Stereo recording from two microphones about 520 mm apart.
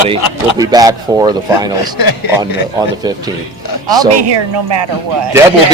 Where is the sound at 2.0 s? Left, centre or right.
Left.